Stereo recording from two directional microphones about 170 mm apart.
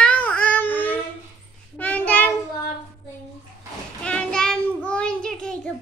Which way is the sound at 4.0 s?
5° left (ahead or behind).